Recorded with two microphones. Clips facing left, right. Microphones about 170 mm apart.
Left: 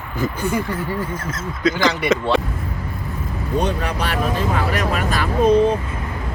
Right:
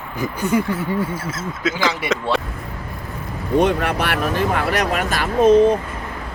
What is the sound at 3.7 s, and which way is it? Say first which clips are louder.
Speech: right 3 dB; 65° right (ahead or behind).